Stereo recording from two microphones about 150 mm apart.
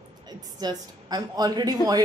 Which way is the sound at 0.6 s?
25° right (ahead or behind).